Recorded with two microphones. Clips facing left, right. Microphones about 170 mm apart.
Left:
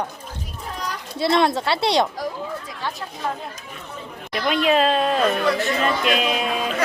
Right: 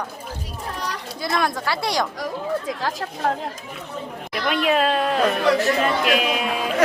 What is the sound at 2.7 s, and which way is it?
Speech, 90° right.